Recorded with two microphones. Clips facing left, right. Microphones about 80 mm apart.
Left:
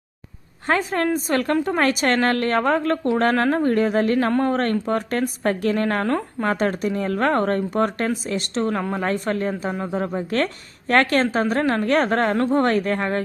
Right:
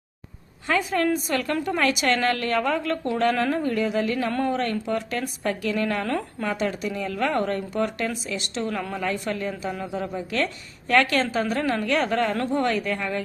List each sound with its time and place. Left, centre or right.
0.7 s a woman's voice: left